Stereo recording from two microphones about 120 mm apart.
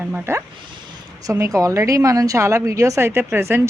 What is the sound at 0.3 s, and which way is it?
A woman's voice, 20° right (ahead or behind).